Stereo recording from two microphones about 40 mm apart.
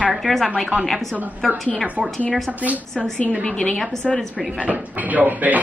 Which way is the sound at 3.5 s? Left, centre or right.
Left.